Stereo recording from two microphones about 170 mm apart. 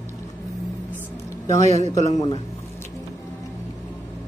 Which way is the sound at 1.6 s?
40° right (ahead or behind).